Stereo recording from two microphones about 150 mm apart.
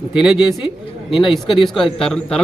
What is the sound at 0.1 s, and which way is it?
A man's voice, 5° right (ahead or behind).